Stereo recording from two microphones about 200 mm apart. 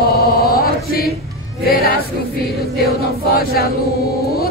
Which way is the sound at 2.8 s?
50° left (ahead or behind).